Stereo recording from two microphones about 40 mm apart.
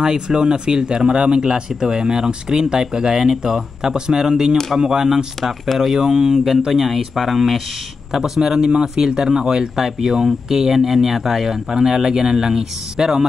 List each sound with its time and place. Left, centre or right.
0.0 s speech: centre
8.1 s speech: centre